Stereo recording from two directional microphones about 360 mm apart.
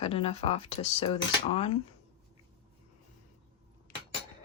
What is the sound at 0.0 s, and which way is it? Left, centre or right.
Speech, centre.